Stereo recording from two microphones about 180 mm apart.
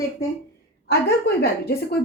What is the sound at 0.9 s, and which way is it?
A woman's voice, 65° left (ahead or behind).